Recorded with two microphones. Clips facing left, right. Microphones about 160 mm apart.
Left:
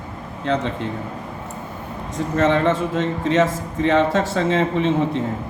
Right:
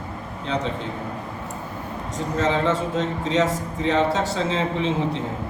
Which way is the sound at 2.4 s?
60° left (ahead or behind).